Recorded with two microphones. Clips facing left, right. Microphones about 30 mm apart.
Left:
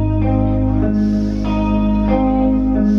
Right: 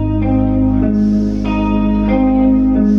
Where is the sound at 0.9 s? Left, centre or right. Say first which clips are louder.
Right 3 dB; centre.